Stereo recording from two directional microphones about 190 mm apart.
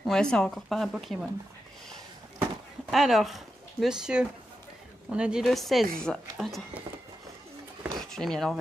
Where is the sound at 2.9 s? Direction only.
Centre (ahead or behind).